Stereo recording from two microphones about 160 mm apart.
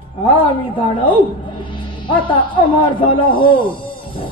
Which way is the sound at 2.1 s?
30° left (ahead or behind).